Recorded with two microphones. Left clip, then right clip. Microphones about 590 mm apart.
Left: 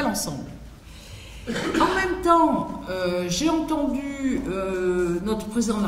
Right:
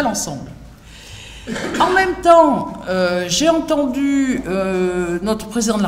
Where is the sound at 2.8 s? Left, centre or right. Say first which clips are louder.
Right 10 dB; right.